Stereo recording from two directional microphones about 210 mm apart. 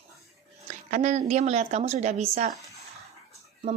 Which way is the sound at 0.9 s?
35° right (ahead or behind).